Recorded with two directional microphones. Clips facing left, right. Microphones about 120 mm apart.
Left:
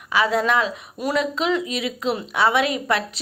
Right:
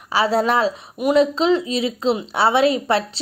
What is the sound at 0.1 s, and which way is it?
A woman's voice, 30° right (ahead or behind).